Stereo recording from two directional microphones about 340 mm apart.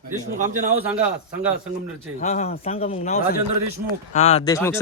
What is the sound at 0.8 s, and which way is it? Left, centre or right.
Speech, centre.